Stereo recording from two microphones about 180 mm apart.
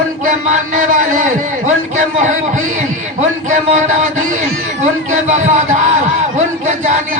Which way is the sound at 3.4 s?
40° right (ahead or behind).